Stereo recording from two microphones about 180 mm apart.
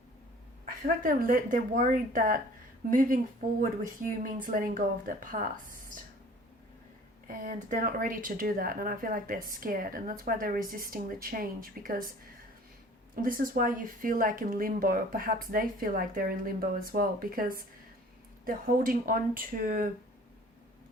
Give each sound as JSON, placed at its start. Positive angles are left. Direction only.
{"t": 0.6, "sound": "speech", "side_deg": -50}
{"t": 4.2, "sound": "speech", "side_deg": -50}
{"t": 7.3, "sound": "speech", "side_deg": -50}
{"t": 13.2, "sound": "speech", "side_deg": -50}